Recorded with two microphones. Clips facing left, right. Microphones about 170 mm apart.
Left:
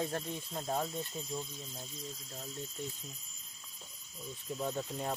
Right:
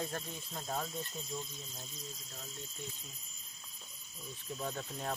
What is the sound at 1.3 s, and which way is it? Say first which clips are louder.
Speech: left 2 dB; 10° left (ahead or behind).